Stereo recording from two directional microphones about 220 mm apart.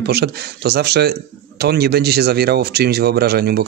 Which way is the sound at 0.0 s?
50° right (ahead or behind).